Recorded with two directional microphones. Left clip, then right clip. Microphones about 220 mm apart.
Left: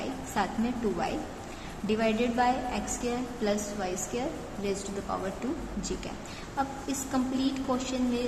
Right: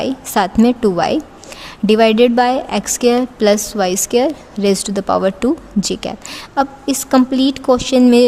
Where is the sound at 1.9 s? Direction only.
55° right (ahead or behind).